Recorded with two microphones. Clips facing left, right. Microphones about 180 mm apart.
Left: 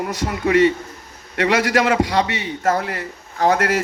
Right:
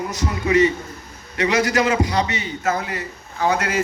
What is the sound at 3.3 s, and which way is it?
Speech, 45° left (ahead or behind).